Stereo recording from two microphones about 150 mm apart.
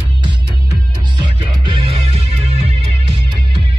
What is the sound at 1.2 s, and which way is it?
Music, 35° right (ahead or behind).